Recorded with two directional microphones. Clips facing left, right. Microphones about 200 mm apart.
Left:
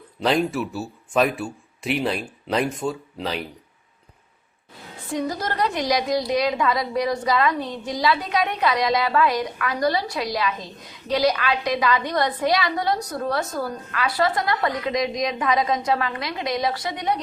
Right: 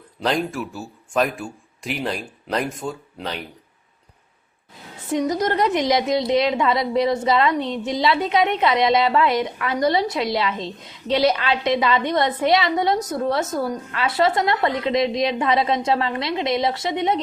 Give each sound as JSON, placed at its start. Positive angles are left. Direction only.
{"t": 0.2, "sound": "speech", "side_deg": 5}
{"t": 5.0, "sound": "a woman's voice", "side_deg": -20}